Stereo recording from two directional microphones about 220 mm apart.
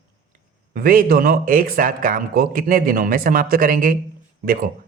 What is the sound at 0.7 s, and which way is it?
Speech, 40° right (ahead or behind).